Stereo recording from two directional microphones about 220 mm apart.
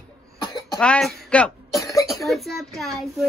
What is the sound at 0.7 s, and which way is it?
Cough, 5° left (ahead or behind).